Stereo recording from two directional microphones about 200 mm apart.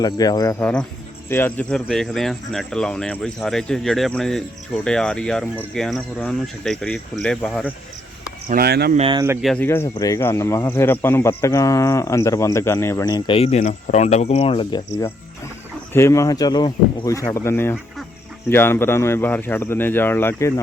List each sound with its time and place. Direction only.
0.0 s speech: 20° left (ahead or behind)
0.6 s speech: 5° left (ahead or behind)
8.4 s speech: 50° right (ahead or behind)
9.0 s speech: 25° right (ahead or behind)
9.4 s speech: centre (ahead or behind)
9.6 s speech: 15° left (ahead or behind)
15.9 s speech: 15° left (ahead or behind)